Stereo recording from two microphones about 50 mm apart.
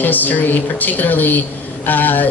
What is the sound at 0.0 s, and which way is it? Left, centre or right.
Speech, left.